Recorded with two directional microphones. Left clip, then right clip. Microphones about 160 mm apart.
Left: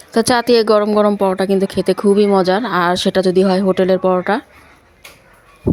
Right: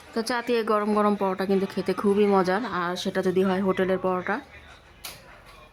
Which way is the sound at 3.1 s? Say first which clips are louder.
Left 11 dB; 30° left (ahead or behind).